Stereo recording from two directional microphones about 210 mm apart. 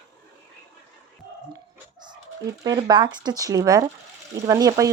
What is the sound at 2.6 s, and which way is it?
Speech, 20° right (ahead or behind).